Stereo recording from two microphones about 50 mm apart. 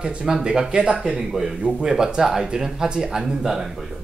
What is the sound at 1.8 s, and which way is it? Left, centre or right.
Speech, centre.